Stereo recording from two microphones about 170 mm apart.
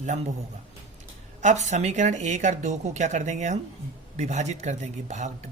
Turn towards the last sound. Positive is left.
turn(degrees=-45)  # may be behind; listen again after turning